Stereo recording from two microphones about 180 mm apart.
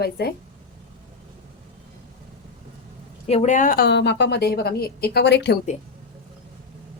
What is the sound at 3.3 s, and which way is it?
A woman's voice, 40° left (ahead or behind).